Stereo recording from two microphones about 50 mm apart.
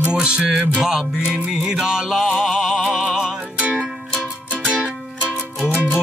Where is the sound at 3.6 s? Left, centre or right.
Centre.